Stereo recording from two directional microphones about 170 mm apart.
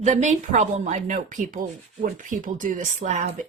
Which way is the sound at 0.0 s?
45° right (ahead or behind).